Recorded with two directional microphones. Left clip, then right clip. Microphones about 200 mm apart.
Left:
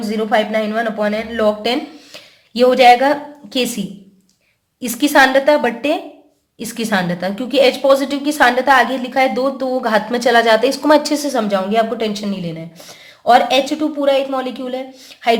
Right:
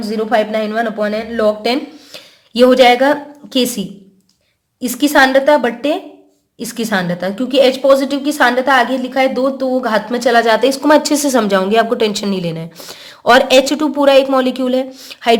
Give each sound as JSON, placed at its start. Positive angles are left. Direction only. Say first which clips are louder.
{"t": 0.1, "sound": "speech", "louder": "right 1 dB", "side_deg": -15}
{"t": 4.8, "sound": "a woman's voice", "louder": "right 1 dB", "side_deg": -10}